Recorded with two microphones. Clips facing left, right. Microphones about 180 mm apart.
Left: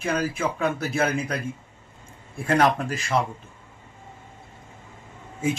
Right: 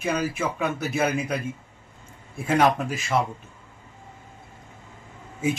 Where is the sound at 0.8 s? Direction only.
20° right (ahead or behind).